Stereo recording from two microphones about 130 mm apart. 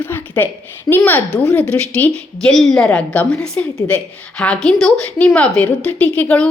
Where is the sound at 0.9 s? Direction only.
15° left (ahead or behind).